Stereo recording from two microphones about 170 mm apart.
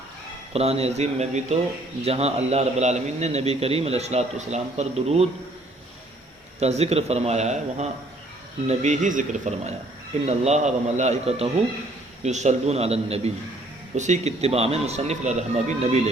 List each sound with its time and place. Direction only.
0.5 s speech: 35° right (ahead or behind)
6.6 s speech: 40° right (ahead or behind)